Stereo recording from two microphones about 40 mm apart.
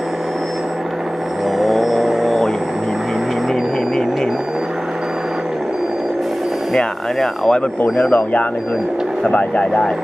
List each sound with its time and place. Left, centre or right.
1.5 s vehicle: centre
6.7 s speech: centre
8.1 s speech: left